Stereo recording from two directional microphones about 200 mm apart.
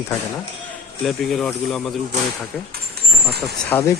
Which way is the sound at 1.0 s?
Centre (ahead or behind).